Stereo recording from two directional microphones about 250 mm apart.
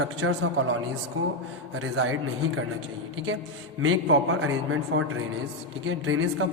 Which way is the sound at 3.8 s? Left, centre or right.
Right.